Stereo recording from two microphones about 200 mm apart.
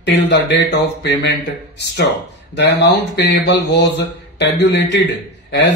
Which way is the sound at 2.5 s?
60° left (ahead or behind).